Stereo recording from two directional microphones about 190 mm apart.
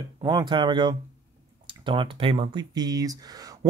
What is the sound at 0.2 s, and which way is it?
Speech, 25° right (ahead or behind).